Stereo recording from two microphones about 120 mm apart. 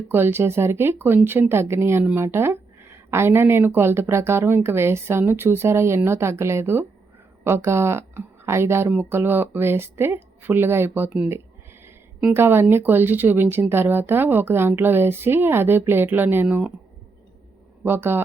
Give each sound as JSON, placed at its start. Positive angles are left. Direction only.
{"t": 0.1, "sound": "a woman's voice", "side_deg": -20}
{"t": 12.3, "sound": "speech", "side_deg": -20}
{"t": 17.8, "sound": "speech", "side_deg": -20}